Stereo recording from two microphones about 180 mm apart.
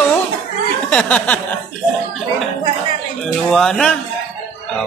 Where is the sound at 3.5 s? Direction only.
5° left (ahead or behind).